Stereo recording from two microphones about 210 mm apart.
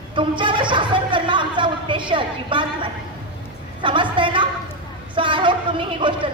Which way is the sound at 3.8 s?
25° right (ahead or behind).